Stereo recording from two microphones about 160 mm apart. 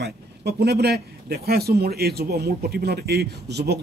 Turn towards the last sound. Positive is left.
turn(degrees=-90)